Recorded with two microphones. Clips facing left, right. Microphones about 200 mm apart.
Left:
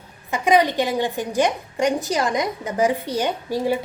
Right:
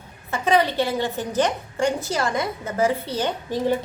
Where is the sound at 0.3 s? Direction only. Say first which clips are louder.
Left 2 dB; 15° left (ahead or behind).